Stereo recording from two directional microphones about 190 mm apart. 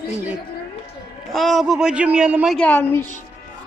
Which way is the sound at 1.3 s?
Centre (ahead or behind).